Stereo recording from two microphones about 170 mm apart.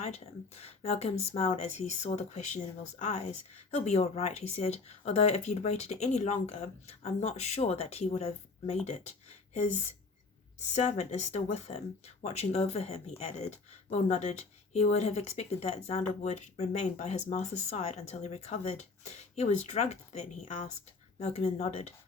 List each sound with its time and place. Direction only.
0.0 s speech: 40° left (ahead or behind)
10.7 s speech: 40° left (ahead or behind)